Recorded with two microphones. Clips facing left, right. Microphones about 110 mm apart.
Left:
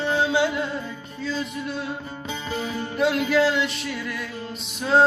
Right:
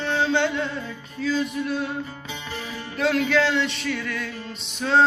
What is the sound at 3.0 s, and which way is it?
Music, 5° left (ahead or behind).